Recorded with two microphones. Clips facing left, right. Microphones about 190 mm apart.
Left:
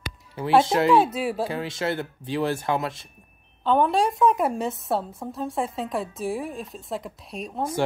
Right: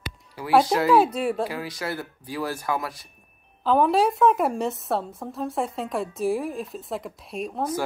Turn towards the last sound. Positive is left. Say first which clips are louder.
# right 3 dB
turn(degrees=0)  # may be behind; listen again after turning